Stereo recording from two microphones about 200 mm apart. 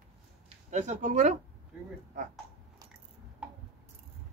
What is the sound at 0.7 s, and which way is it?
Speech, 35° right (ahead or behind).